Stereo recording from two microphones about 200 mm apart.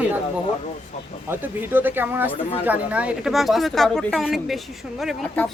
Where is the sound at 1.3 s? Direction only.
10° right (ahead or behind).